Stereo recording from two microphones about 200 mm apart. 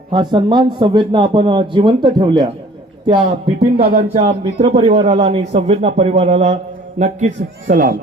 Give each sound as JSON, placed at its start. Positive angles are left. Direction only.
{"t": 0.1, "sound": "speech", "side_deg": -25}